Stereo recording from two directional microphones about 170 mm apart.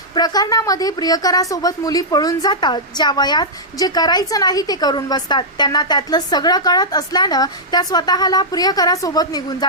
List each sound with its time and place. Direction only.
0.2 s a woman's voice: 20° left (ahead or behind)